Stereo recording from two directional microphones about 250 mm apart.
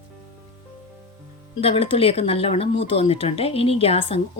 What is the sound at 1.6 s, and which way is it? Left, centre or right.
Speech, left.